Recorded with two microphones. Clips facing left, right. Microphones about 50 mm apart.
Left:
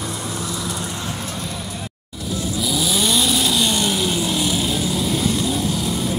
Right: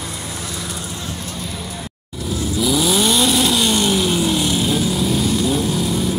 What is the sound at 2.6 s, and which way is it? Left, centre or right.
Vehicle, centre.